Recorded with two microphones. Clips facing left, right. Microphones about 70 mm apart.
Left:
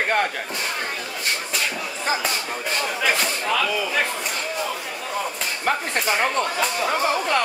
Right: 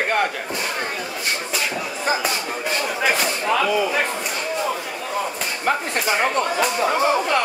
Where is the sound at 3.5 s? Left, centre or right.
Centre.